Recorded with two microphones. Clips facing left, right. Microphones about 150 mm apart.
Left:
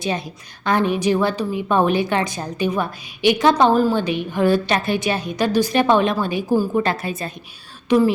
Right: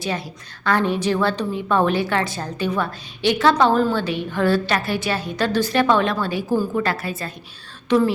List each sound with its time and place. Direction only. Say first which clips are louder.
0.6 s a woman's voice: left 1 dB; 15° left (ahead or behind)